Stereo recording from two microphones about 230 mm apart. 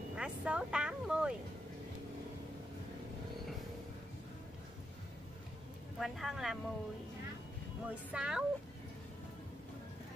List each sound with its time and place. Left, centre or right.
0.1 s speech: centre
5.9 s speech: centre
7.9 s speech: centre